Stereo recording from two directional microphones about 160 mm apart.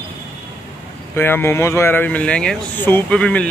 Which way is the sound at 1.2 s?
15° left (ahead or behind).